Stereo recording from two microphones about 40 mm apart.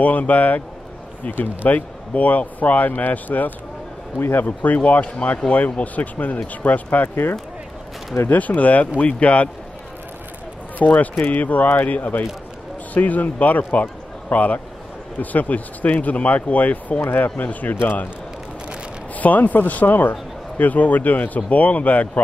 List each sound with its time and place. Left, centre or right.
0.0 s a man's voice: left
1.3 s a man's voice: left
4.2 s speech: left
4.5 s a man's voice: left
8.3 s speech: left
10.8 s a man's voice: left
19.1 s a man's voice: left